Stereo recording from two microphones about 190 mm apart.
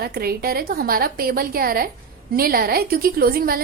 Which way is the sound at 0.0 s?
55° right (ahead or behind).